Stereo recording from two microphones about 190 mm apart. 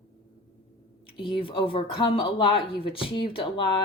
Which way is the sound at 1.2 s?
25° left (ahead or behind).